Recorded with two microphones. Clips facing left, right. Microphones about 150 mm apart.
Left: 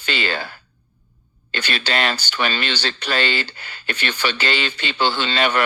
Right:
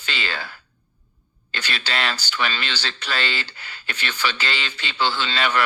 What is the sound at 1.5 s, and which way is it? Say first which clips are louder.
A man's voice: left 4 dB; 55° left (ahead or behind).